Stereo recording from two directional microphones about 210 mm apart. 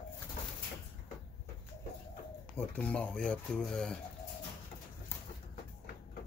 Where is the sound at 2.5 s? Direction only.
5° left (ahead or behind).